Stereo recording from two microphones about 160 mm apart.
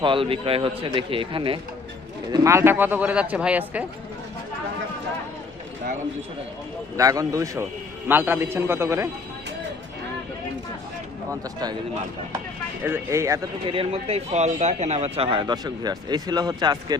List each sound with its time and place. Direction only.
0.0 s a man's voice: 35° right (ahead or behind)
2.3 s speech: 20° right (ahead or behind)
6.9 s a man's voice: 20° right (ahead or behind)
12.8 s speech: 15° right (ahead or behind)
13.7 s a man's voice: 35° right (ahead or behind)